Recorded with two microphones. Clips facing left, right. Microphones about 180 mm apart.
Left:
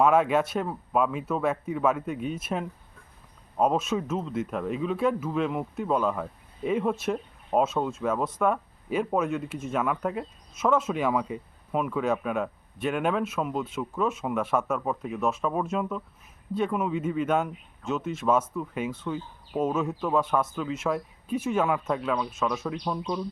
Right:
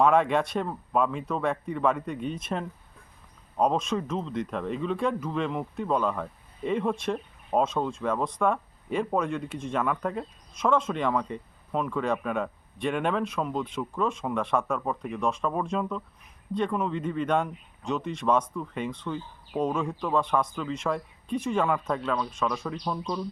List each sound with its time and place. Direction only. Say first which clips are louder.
0.0 s speech: left 1 dB; 5° left (ahead or behind)